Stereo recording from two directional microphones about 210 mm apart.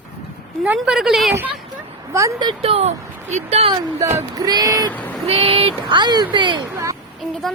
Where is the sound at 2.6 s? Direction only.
30° right (ahead or behind).